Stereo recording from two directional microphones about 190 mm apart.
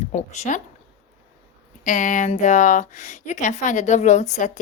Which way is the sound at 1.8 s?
45° left (ahead or behind).